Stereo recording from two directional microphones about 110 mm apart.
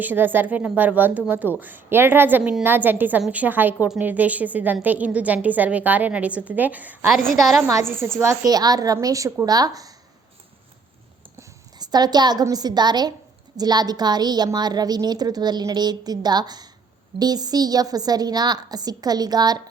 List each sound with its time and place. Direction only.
0.0 s a woman's voice: 15° right (ahead or behind)
7.1 s a woman's voice: centre (ahead or behind)
8.2 s a woman's voice: 30° right (ahead or behind)
11.8 s a woman's voice: 40° right (ahead or behind)